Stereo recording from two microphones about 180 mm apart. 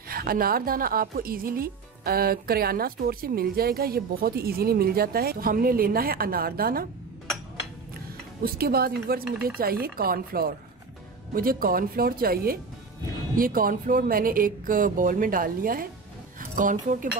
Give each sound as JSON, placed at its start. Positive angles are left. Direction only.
{"t": 0.1, "sound": "speech", "side_deg": -55}
{"t": 8.5, "sound": "a woman's voice", "side_deg": -55}